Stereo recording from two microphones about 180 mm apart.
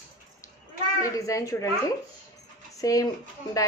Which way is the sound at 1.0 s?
20° left (ahead or behind).